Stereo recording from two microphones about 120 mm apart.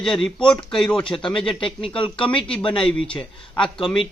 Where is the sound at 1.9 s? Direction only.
45° left (ahead or behind).